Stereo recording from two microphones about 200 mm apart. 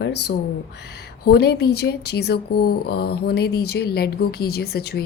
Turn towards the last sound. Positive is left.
turn(degrees=50)  # may be behind; listen again after turning